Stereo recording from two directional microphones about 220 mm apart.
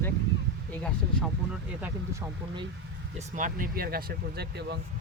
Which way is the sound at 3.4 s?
40° right (ahead or behind).